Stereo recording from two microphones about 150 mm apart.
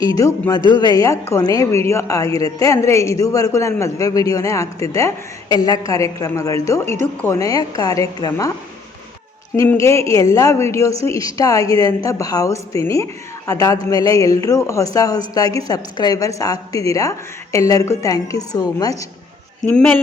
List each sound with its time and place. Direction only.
0.2 s a woman's voice: 20° left (ahead or behind)
9.6 s a woman's voice: 20° left (ahead or behind)
19.6 s speech: 10° left (ahead or behind)